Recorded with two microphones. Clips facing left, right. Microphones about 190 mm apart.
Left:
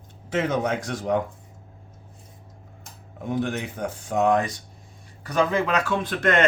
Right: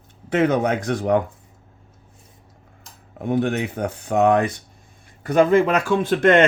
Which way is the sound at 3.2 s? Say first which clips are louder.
Right 5 dB; 60° right (ahead or behind).